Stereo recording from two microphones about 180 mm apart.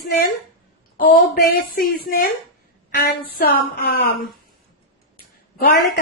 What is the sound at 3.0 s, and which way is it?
Speech, 60° left (ahead or behind).